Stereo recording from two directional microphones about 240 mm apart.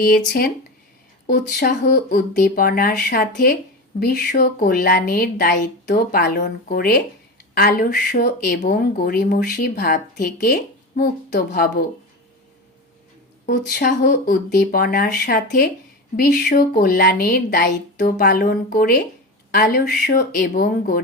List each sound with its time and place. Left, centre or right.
1.3 s speech: left
13.4 s speech: left